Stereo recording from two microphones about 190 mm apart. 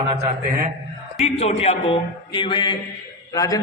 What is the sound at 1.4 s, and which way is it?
A man's voice, 35° left (ahead or behind).